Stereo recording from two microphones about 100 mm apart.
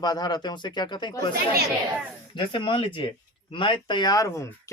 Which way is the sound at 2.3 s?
55° left (ahead or behind).